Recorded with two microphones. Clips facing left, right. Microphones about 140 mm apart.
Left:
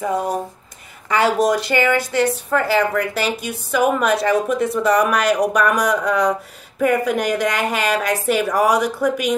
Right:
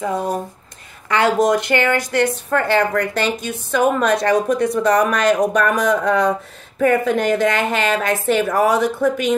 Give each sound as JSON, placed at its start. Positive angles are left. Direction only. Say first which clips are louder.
{"t": 1.1, "sound": "a woman's voice", "louder": "right 1 dB", "side_deg": 5}